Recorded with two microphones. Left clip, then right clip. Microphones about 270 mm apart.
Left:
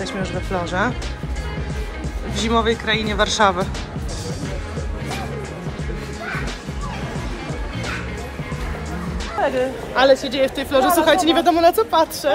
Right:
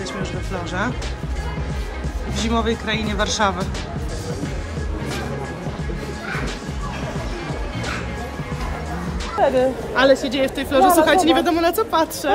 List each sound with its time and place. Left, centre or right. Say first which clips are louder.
0.2 s speech: left 4 dB; centre
2.3 s speech: left 3 dB; centre
9.4 s a sound: right 3 dB; right
9.9 s speech: left 2 dB; centre